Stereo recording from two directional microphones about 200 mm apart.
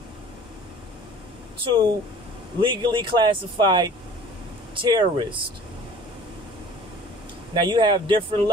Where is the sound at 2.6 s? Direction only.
25° right (ahead or behind).